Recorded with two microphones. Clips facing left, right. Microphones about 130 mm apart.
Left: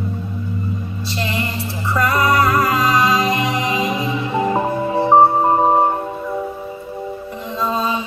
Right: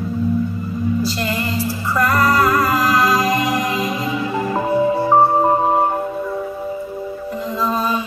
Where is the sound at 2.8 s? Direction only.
25° left (ahead or behind).